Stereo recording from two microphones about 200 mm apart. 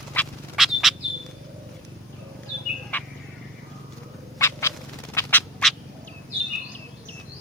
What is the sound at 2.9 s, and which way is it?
Vehicle, 10° left (ahead or behind).